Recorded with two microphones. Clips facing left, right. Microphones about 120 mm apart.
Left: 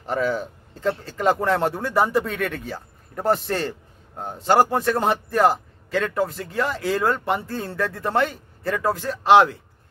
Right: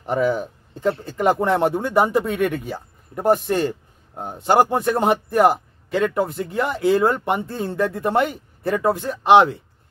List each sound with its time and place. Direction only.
0.0 s a man's voice: 15° right (ahead or behind)